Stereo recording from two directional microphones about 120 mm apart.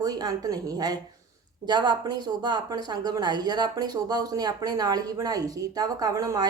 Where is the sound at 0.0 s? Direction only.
30° right (ahead or behind).